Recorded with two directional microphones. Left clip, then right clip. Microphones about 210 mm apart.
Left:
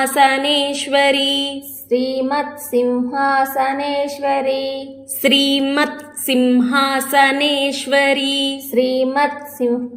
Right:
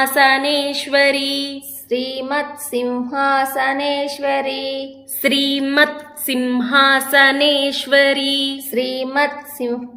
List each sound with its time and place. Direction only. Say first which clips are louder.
0.0 s a woman's voice: even; centre (ahead or behind)
1.9 s child singing: left 3 dB; 20° right (ahead or behind)
5.2 s a woman's voice: left 3 dB; centre (ahead or behind)
8.7 s child singing: left 4 dB; 20° right (ahead or behind)